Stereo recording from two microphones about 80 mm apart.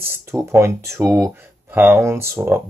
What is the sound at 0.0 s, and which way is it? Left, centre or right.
Speech, right.